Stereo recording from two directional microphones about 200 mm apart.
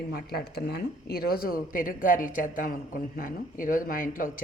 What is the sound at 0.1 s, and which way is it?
Speech, 50° left (ahead or behind).